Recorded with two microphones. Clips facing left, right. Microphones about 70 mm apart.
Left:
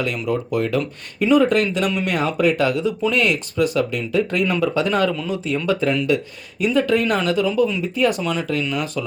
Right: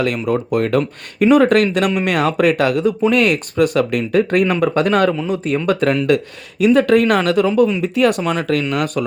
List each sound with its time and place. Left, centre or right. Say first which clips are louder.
0.3 s speech: right 2 dB; right
7.4 s speech: right 5 dB; right